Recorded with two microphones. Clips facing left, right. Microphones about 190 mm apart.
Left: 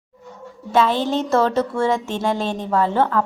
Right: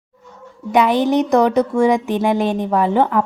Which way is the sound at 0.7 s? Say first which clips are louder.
Right 4 dB; 15° right (ahead or behind).